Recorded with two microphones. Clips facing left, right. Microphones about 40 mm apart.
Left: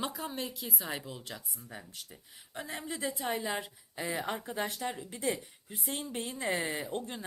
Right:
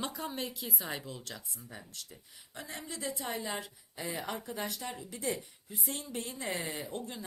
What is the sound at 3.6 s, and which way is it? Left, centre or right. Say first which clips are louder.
A woman's voice: left 3 dB; left.